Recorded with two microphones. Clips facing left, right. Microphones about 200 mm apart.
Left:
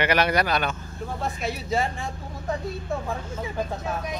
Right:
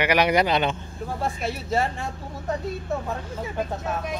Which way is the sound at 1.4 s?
5° right (ahead or behind).